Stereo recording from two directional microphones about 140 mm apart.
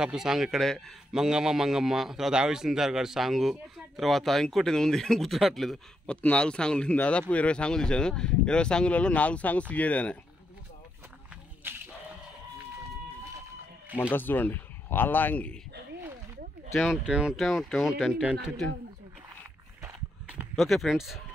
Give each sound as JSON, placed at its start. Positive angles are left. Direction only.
{"t": 0.0, "sound": "a man's voice", "side_deg": -5}
{"t": 11.6, "sound": "a sound", "side_deg": -15}
{"t": 14.1, "sound": "speech", "side_deg": 15}
{"t": 16.7, "sound": "a man's voice", "side_deg": -5}
{"t": 19.8, "sound": "a sound", "side_deg": -10}
{"t": 20.5, "sound": "a man's voice", "side_deg": 0}